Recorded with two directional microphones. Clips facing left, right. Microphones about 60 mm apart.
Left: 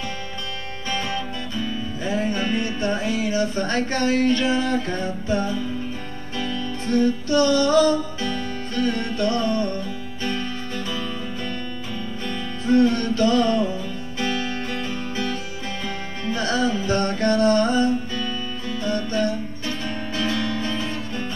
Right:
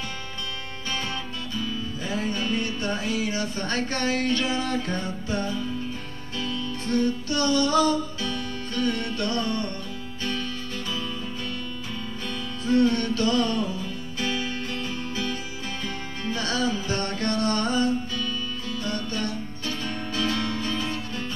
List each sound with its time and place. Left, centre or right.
0.8 s music: left
6.9 s music: left
12.6 s music: left
14.7 s music: left
16.3 s music: left